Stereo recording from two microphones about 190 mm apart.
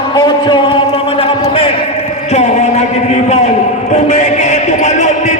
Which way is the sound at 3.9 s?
35° left (ahead or behind).